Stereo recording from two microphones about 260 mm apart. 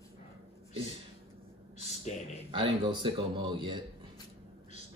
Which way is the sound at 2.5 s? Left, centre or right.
Centre.